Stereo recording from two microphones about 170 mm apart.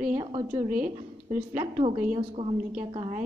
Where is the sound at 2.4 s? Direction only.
30° right (ahead or behind).